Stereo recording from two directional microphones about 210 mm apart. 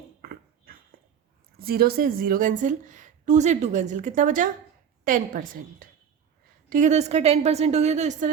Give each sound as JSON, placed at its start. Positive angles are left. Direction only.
{"t": 0.2, "sound": "dog", "side_deg": -45}
{"t": 1.5, "sound": "a woman's voice", "side_deg": -45}